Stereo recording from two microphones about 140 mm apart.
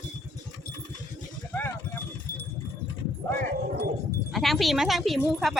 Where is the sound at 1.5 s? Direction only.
15° left (ahead or behind).